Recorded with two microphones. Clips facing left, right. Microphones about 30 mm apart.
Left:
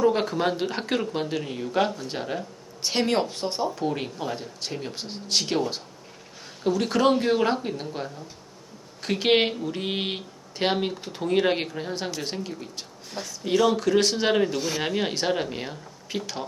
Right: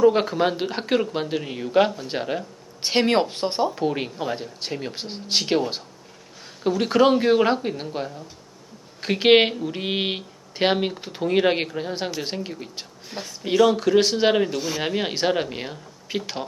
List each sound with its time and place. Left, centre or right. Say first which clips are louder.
0.0 s speech: right 4 dB; centre
13.5 s speech: right 3 dB; centre